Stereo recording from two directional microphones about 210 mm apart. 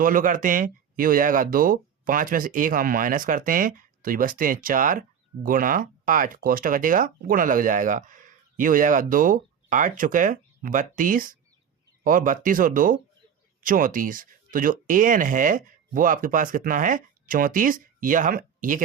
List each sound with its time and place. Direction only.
0.0 s speech: 40° right (ahead or behind)